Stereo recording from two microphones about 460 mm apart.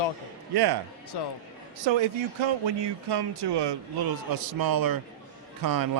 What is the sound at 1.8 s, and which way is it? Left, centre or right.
Speech, right.